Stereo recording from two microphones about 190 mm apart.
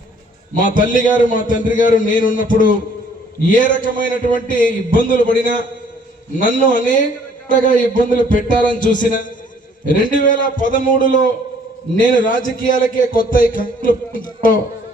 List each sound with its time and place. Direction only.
0.5 s a man's voice: 45° left (ahead or behind)
12.1 s a man's voice: 45° left (ahead or behind)